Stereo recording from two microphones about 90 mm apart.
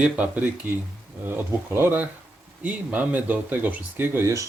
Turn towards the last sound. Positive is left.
turn(degrees=-30)  # may be behind; listen again after turning